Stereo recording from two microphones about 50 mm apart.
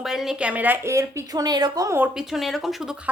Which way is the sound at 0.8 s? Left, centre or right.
Right.